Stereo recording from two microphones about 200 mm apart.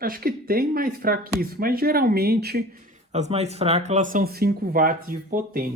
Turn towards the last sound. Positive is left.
turn(degrees=-45)  # may be behind; listen again after turning